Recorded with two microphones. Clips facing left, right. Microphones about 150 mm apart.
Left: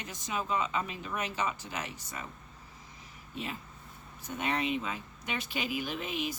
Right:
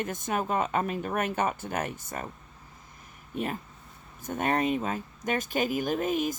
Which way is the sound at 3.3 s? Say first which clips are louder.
Right 7 dB; 50° right (ahead or behind).